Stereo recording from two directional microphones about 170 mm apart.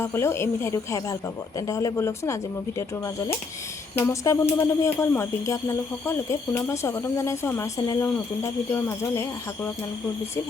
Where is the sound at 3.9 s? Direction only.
15° left (ahead or behind).